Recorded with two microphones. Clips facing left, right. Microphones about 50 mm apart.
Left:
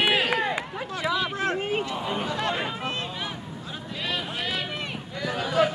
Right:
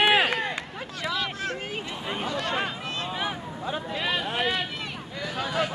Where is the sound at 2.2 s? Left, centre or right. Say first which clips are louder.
Even; centre.